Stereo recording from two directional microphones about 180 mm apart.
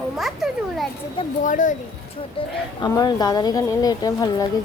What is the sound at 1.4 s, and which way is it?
Speech, 45° left (ahead or behind).